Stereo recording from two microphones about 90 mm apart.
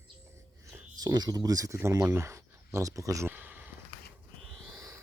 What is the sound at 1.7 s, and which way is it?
Speech, 30° right (ahead or behind).